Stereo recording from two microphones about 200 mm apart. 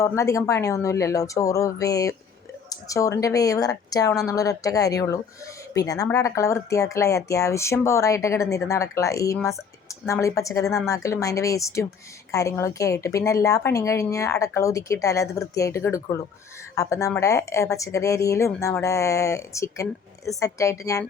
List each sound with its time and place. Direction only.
0.0 s a woman's voice: 15° left (ahead or behind)